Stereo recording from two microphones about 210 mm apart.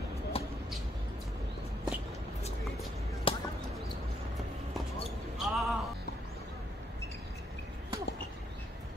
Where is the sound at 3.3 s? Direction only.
25° left (ahead or behind).